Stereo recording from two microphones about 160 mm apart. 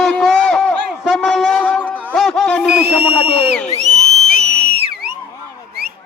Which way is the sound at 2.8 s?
80° right.